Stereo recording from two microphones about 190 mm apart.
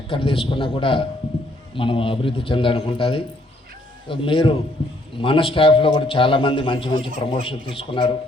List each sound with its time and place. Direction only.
0.1 s a man's voice: 30° left (ahead or behind)